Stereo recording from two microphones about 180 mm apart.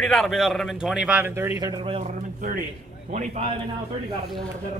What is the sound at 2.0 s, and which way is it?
Speech, 50° right (ahead or behind).